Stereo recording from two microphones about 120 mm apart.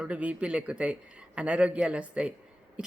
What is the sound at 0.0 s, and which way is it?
Speech, 10° right (ahead or behind).